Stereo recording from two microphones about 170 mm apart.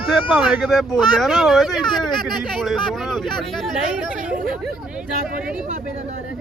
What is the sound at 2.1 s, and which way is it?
Speech, 25° left (ahead or behind).